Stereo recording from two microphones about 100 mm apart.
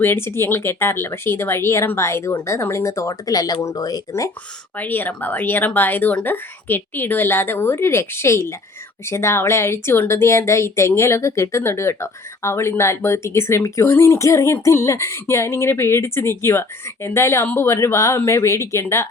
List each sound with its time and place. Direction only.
0.0 s speech: 25° left (ahead or behind)
4.8 s speech: 20° left (ahead or behind)